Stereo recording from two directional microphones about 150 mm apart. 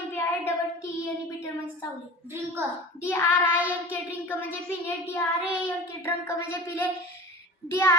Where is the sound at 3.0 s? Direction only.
15° left (ahead or behind).